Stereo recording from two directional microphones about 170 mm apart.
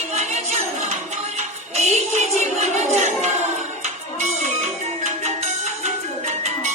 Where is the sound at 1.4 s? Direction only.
40° right (ahead or behind).